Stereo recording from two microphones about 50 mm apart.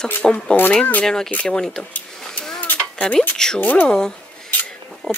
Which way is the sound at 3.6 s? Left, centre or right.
Left.